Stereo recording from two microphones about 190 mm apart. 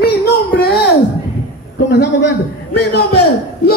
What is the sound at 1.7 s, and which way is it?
Speech, 65° left (ahead or behind).